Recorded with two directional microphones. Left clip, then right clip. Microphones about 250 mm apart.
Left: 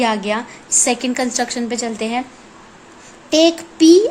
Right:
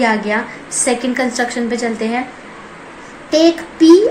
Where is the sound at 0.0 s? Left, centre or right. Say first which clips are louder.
Right 3 dB; left.